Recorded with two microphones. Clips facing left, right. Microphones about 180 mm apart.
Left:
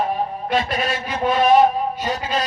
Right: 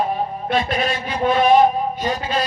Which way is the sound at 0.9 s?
10° right (ahead or behind).